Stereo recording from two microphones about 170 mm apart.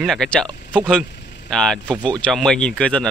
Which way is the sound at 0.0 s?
5° left (ahead or behind).